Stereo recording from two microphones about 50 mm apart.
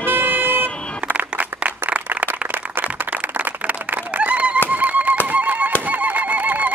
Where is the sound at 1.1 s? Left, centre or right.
Right.